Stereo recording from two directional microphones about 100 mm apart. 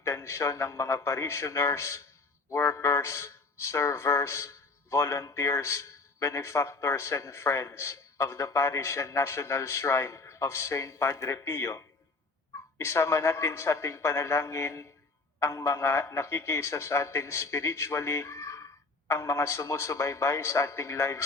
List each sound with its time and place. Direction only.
0.0 s speech: 30° left (ahead or behind)
12.8 s speech: 25° left (ahead or behind)